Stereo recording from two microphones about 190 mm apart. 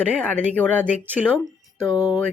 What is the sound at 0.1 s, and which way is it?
Speech, 5° left (ahead or behind).